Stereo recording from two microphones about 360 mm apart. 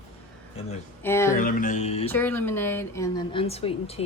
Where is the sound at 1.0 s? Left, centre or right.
Centre.